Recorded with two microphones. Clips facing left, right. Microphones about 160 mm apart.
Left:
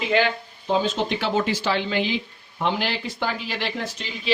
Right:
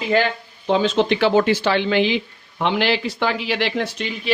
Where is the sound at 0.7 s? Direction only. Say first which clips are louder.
Right 5 dB; 75° right (ahead or behind).